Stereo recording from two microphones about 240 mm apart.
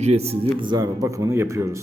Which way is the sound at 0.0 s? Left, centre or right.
Right.